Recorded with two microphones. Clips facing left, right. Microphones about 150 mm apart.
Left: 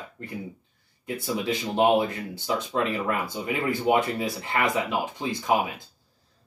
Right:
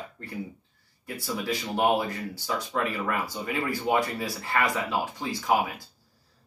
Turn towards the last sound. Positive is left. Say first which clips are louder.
# left 1 dB
turn(degrees=20)  # may be behind; listen again after turning